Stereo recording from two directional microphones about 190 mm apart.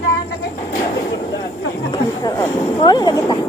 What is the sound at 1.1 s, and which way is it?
Vehicle, 20° left (ahead or behind).